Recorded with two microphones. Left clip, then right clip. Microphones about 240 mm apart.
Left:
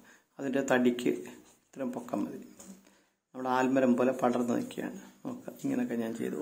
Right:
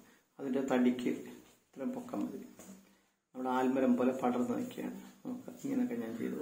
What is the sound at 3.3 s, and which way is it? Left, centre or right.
A man's voice, left.